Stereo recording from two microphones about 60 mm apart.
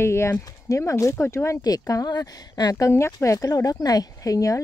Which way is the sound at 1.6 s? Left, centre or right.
Left.